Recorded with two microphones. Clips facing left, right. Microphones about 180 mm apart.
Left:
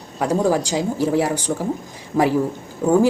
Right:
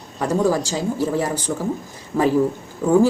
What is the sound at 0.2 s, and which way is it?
Speech, 15° left (ahead or behind).